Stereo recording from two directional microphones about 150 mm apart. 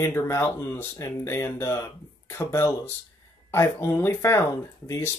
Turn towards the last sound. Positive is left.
turn(degrees=15)  # may be behind; listen again after turning